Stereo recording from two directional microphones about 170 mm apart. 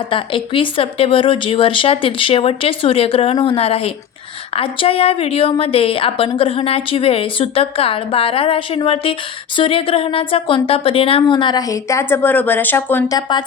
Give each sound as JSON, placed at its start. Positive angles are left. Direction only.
{"t": 0.1, "sound": "a woman's voice", "side_deg": 30}
{"t": 13.1, "sound": "speech", "side_deg": 25}